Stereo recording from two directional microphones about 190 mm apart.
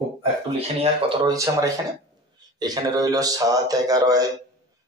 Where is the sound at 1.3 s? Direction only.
15° right (ahead or behind).